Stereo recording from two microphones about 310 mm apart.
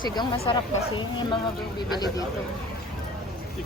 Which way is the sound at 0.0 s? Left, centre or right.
Centre.